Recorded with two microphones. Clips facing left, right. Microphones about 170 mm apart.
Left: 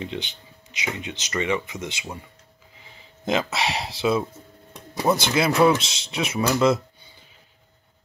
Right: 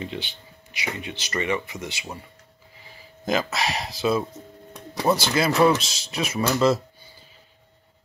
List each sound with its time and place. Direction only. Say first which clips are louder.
0.0 s speech: left 1 dB; 20° left (ahead or behind)
4.0 s speech: left 1 dB; 5° left (ahead or behind)
4.9 s a sound: even; centre (ahead or behind)
5.3 s speech: left 1 dB; centre (ahead or behind)
5.8 s speech: left 1 dB; 20° left (ahead or behind)
6.5 s speech: even; centre (ahead or behind)